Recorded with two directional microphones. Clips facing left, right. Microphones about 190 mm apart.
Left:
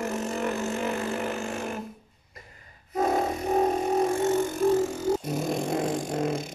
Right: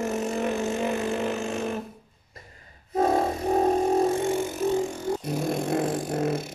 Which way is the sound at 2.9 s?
30° right (ahead or behind).